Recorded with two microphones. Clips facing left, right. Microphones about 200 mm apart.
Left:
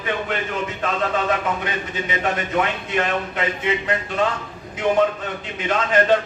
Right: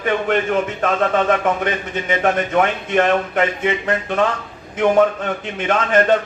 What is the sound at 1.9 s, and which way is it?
A man's voice, 50° right (ahead or behind).